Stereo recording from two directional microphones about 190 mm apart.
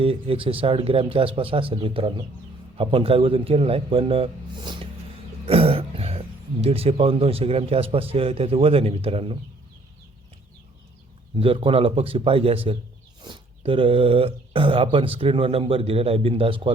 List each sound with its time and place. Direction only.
0.0 s speech: 30° right (ahead or behind)
11.3 s speech: 30° right (ahead or behind)